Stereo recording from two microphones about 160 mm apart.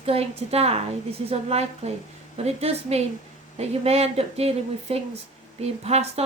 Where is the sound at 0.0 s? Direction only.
40° right (ahead or behind).